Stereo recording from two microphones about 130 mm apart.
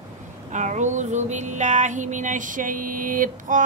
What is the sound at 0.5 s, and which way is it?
Female singing, 65° right (ahead or behind).